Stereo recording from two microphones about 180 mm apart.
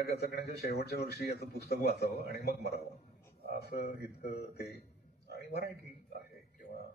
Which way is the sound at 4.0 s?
65° left (ahead or behind).